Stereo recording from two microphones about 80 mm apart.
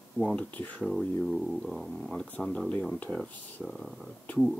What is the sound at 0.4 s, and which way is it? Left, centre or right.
Speech, centre.